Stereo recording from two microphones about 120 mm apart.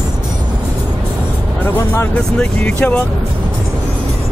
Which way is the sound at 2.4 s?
10° left (ahead or behind).